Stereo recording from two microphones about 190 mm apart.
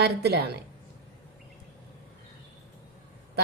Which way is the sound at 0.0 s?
60° right (ahead or behind).